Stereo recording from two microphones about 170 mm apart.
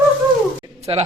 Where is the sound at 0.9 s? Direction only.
35° right (ahead or behind).